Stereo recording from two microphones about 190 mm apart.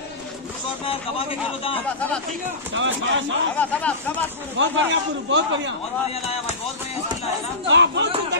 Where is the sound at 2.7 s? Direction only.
80° right.